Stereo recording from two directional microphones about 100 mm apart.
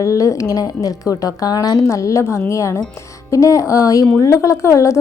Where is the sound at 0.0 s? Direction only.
35° left (ahead or behind).